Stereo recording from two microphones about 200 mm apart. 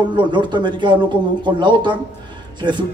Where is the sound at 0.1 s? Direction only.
25° right (ahead or behind).